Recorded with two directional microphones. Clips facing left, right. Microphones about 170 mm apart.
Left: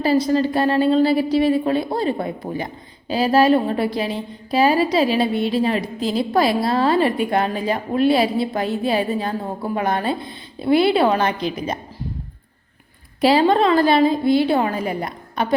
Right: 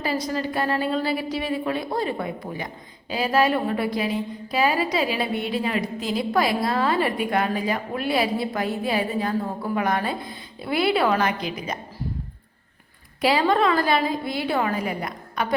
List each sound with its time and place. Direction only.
0.0 s a woman's voice: 30° left (ahead or behind)
13.2 s a woman's voice: 30° left (ahead or behind)